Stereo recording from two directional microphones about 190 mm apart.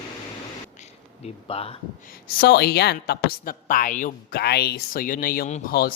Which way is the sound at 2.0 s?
55° left (ahead or behind).